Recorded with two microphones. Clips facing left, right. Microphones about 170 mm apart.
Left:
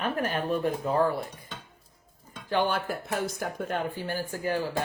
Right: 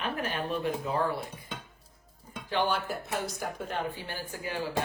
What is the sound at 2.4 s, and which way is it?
Speech, 50° left (ahead or behind).